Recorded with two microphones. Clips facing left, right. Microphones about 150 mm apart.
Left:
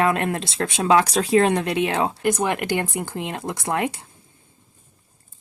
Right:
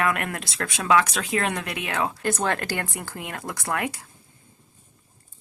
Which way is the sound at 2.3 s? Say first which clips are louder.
Left 5 dB; 15° left (ahead or behind).